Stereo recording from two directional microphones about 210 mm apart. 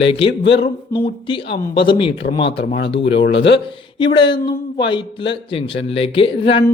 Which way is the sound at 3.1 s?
55° left (ahead or behind).